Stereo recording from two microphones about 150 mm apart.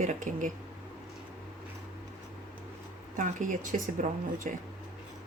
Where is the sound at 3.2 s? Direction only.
60° right (ahead or behind).